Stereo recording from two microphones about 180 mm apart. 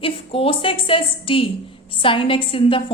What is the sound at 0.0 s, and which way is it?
A woman's voice, 30° left (ahead or behind).